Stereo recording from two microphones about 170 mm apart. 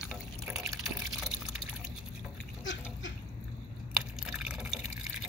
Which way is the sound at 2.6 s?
90° left.